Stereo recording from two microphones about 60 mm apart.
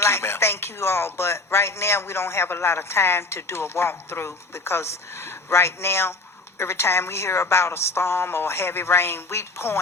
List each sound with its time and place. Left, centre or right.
0.0 s speech: left